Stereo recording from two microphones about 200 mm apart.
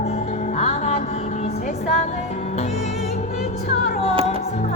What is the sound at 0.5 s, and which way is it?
Music, 35° left (ahead or behind).